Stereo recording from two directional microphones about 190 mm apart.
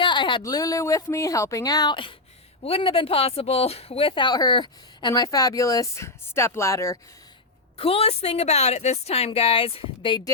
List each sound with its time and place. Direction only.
0.0 s speech: 25° left (ahead or behind)
7.8 s a woman's voice: 30° left (ahead or behind)